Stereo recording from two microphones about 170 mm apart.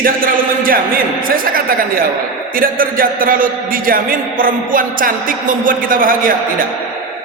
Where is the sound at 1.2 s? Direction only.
55° right (ahead or behind).